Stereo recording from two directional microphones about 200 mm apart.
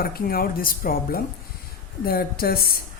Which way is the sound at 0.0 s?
50° left (ahead or behind).